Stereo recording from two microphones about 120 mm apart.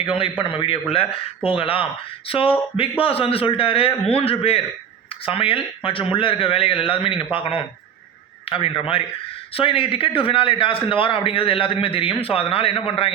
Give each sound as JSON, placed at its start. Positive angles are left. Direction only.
{"t": 0.0, "sound": "a man's voice", "side_deg": 50}